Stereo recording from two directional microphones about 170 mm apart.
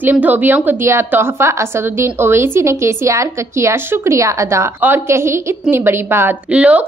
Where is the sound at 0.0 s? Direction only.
10° right (ahead or behind).